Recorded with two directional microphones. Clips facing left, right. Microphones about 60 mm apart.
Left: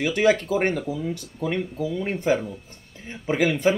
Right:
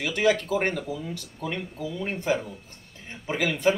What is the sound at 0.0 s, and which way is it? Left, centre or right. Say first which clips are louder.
Speech: left 3 dB; left.